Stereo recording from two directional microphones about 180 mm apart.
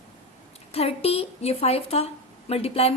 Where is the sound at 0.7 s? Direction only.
35° left (ahead or behind).